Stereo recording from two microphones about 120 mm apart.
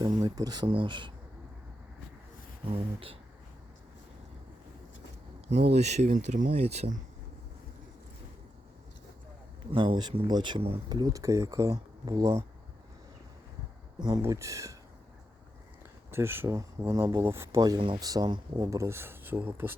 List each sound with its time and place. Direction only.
0.0 s speech: 30° right (ahead or behind)
2.7 s speech: 50° right (ahead or behind)
5.5 s speech: 70° right (ahead or behind)
9.7 s speech: 40° right (ahead or behind)
14.2 s speech: 25° right (ahead or behind)
16.1 s speech: 20° right (ahead or behind)
17.7 s speech: 40° right (ahead or behind); by 19.7 s 20° right (ahead or behind)